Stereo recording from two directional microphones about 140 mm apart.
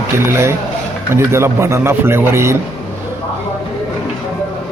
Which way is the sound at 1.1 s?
20° right (ahead or behind).